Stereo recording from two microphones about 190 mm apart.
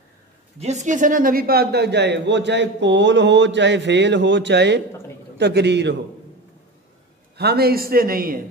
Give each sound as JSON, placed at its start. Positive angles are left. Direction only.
{"t": 0.6, "sound": "speech", "side_deg": -35}
{"t": 7.3, "sound": "speech", "side_deg": -55}